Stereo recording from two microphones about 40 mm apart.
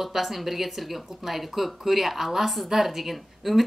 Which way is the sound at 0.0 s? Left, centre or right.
Centre.